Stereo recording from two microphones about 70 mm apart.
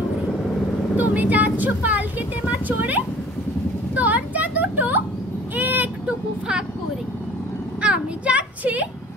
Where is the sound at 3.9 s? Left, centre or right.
Right.